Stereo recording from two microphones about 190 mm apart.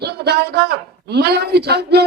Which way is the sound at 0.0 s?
60° right (ahead or behind).